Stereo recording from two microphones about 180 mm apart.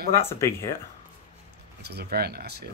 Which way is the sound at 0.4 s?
15° left (ahead or behind).